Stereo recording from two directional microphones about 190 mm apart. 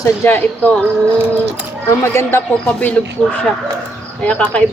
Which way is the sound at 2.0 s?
15° left (ahead or behind).